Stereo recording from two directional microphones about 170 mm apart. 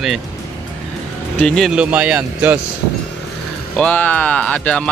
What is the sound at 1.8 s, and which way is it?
Speech, 10° right (ahead or behind).